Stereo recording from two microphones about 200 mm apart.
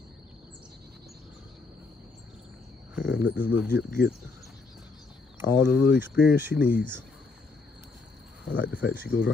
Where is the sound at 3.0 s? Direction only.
10° right (ahead or behind).